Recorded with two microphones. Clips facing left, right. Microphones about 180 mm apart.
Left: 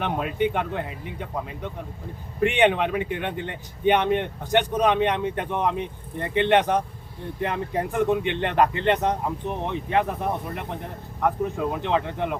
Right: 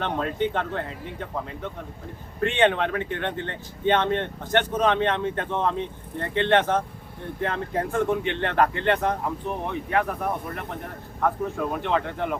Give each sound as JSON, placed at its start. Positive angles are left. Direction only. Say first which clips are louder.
{"t": 0.0, "sound": "speech", "louder": "left 1 dB", "side_deg": 15}